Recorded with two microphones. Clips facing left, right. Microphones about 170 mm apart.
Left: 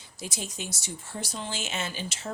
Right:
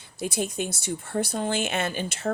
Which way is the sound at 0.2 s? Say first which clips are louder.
Right 9 dB; 55° right (ahead or behind).